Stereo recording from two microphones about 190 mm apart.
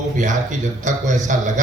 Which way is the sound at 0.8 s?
40° right (ahead or behind).